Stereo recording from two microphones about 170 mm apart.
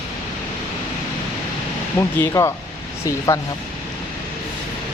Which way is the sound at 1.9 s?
15° left (ahead or behind).